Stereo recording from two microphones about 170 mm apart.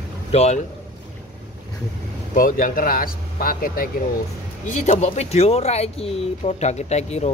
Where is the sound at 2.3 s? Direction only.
55° left (ahead or behind).